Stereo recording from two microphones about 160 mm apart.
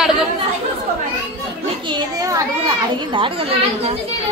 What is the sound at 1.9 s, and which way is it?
Children playing, 20° right (ahead or behind).